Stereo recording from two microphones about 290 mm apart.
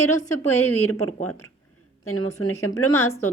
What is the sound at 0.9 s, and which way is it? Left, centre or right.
A woman's voice, left.